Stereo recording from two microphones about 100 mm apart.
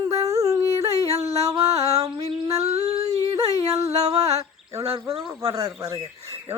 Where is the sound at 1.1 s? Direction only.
90° right.